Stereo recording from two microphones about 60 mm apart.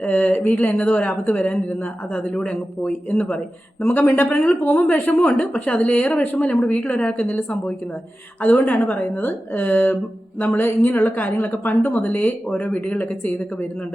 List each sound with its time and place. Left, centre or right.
0.0 s a woman's voice: left